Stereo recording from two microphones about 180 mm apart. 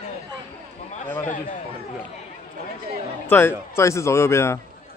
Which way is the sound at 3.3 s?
10° left (ahead or behind).